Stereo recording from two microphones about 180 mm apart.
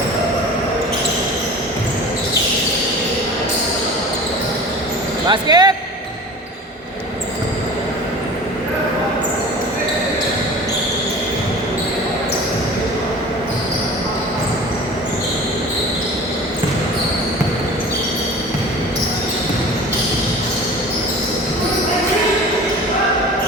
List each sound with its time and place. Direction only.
5.3 s speech: 25° right (ahead or behind)